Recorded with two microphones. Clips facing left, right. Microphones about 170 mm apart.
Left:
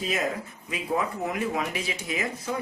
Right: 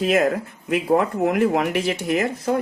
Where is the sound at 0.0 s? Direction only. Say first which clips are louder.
Right 10 dB; 65° right (ahead or behind).